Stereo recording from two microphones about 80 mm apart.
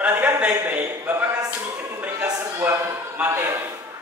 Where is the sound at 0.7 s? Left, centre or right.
Right.